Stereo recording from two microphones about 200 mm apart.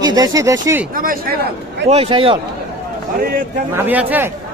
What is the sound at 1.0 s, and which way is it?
Speech, 45° right (ahead or behind).